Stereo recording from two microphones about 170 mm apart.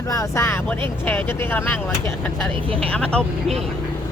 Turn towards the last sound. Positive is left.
turn(degrees=5)  # may be behind; listen again after turning